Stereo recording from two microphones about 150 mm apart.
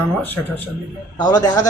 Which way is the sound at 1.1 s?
25° left (ahead or behind).